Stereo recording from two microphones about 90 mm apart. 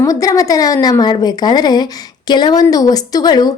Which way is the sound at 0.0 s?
40° left (ahead or behind).